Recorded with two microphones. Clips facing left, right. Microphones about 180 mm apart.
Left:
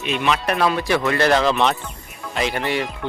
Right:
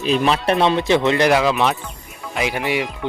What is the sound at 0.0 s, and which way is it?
Speech, 35° right (ahead or behind).